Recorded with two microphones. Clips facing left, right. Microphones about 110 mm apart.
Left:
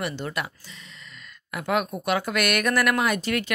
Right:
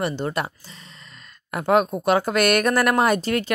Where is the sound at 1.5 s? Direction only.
35° right (ahead or behind).